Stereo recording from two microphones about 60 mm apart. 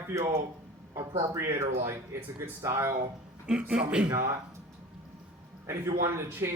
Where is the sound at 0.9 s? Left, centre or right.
Right.